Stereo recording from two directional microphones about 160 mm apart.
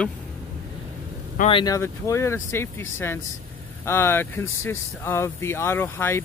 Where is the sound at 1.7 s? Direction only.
20° left (ahead or behind).